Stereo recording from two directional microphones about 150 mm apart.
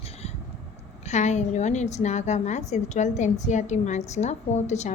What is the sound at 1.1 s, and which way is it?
A woman's voice, 50° left (ahead or behind).